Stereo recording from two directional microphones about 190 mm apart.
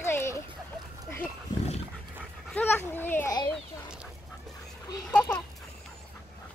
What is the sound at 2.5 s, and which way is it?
A child's voice, 10° left (ahead or behind).